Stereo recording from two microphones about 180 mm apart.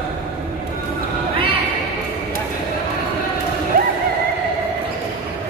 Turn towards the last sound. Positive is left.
turn(degrees=-55)  # may be behind; listen again after turning